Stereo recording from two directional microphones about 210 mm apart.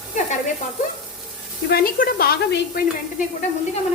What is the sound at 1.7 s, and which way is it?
A woman's voice, 45° left (ahead or behind).